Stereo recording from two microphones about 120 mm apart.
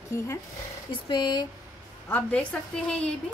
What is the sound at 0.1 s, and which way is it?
Speech, 20° left (ahead or behind).